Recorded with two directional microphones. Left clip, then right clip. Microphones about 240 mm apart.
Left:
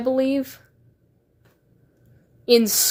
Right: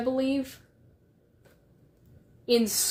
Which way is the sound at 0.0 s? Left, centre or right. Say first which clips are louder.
Left 7 dB; left.